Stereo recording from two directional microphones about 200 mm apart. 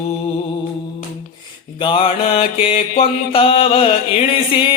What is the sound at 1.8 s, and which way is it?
Mantra, 25° left (ahead or behind).